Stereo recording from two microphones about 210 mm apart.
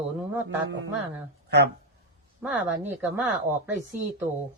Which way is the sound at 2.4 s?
10° right (ahead or behind).